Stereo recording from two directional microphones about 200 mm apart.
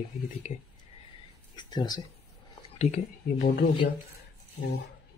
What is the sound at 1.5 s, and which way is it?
Speech, 20° left (ahead or behind).